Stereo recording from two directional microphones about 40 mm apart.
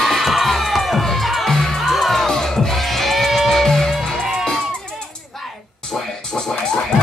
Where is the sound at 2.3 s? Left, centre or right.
Centre.